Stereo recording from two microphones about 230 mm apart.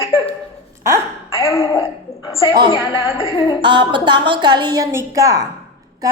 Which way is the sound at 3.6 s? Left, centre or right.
Right.